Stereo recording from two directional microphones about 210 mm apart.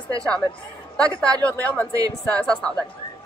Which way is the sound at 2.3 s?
5° left (ahead or behind).